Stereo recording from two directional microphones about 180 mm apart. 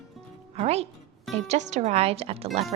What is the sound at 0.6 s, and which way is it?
A woman's voice, 35° right (ahead or behind).